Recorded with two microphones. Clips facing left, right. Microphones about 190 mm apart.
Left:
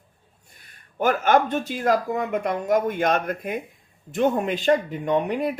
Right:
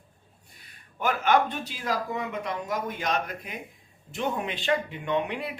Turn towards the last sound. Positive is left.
turn(degrees=45)  # may be behind; listen again after turning